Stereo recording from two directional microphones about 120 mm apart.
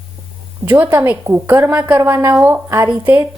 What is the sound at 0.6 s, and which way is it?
Speech, 15° right (ahead or behind).